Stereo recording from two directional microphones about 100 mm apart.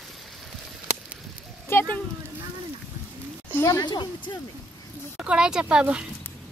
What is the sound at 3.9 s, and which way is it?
Speech, 45° left (ahead or behind).